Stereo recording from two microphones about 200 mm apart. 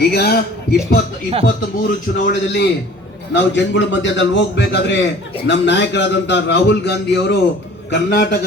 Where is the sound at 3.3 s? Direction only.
60° left (ahead or behind).